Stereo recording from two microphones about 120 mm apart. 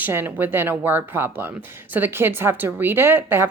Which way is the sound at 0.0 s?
20° right (ahead or behind).